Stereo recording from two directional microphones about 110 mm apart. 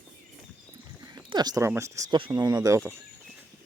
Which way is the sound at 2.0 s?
50° right (ahead or behind).